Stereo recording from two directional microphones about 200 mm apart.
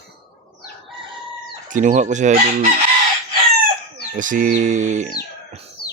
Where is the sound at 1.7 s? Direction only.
40° right (ahead or behind).